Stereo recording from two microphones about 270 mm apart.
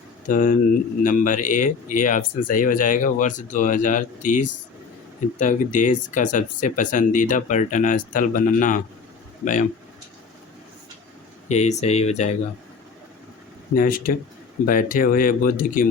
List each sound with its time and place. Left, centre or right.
0.3 s speech: left
11.4 s speech: left
13.7 s speech: left